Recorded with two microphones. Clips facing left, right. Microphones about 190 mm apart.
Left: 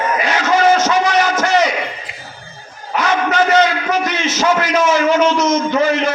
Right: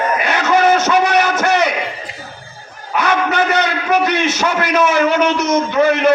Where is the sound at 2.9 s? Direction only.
60° right (ahead or behind).